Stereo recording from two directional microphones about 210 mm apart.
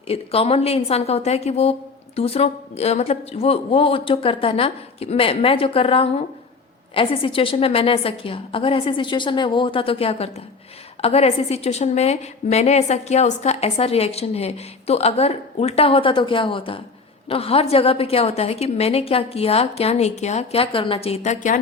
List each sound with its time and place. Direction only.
0.1 s a woman's voice: 30° left (ahead or behind)